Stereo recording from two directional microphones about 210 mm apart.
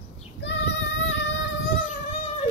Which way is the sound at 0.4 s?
55° left (ahead or behind).